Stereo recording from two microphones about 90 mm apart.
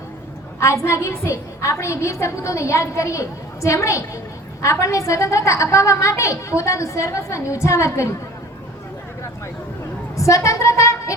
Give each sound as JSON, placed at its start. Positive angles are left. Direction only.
{"t": 0.6, "sound": "a woman's voice", "side_deg": 30}
{"t": 10.2, "sound": "a woman's voice", "side_deg": 35}